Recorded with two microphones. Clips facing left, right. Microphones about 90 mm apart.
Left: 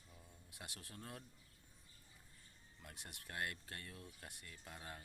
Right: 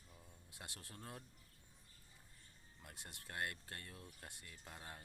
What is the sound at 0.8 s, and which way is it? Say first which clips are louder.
Speech: even; 25° right (ahead or behind).